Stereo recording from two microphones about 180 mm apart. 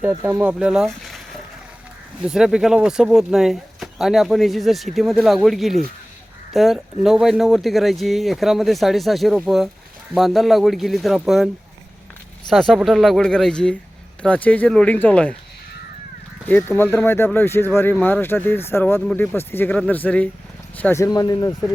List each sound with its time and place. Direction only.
0.0 s speech: 15° right (ahead or behind)
12.5 s speech: centre (ahead or behind)
16.5 s speech: 10° left (ahead or behind)